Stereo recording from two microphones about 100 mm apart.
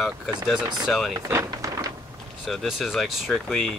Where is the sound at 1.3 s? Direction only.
35° right (ahead or behind).